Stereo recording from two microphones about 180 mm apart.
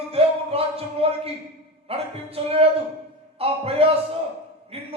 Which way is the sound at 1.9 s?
35° right (ahead or behind).